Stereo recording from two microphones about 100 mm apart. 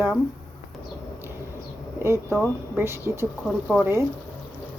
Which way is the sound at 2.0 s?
25° right (ahead or behind).